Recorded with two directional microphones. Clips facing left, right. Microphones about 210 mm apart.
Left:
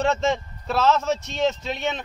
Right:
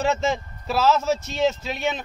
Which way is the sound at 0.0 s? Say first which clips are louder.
Left 1 dB; 5° right (ahead or behind).